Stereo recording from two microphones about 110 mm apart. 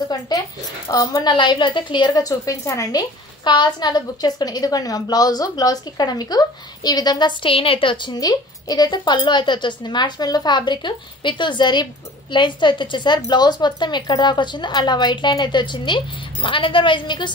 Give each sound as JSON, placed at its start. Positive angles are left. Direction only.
{"t": 0.3, "sound": "a woman's voice", "side_deg": 40}
{"t": 1.2, "sound": "a woman's voice", "side_deg": 45}